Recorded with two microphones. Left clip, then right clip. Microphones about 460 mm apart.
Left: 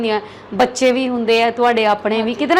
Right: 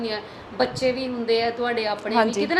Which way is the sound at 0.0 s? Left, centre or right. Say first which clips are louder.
Left 10 dB; left.